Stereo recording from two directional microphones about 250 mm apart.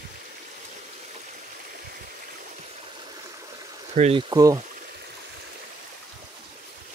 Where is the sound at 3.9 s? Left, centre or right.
Right.